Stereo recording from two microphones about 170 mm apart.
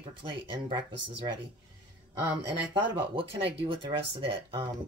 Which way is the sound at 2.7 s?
30° right (ahead or behind).